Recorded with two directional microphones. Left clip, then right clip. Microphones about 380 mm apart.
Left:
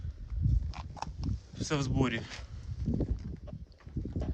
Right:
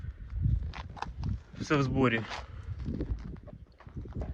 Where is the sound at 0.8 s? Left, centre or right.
Centre.